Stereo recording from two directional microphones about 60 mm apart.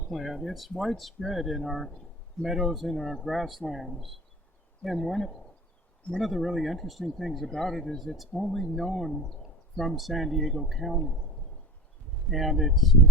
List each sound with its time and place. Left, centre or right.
0.1 s speech: centre
12.3 s speech: centre